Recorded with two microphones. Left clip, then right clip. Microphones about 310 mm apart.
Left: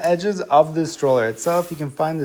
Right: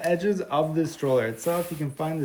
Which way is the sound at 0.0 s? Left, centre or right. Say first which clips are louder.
Left 5 dB; centre.